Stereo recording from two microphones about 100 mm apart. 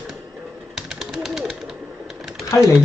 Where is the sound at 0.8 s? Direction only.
5° right (ahead or behind).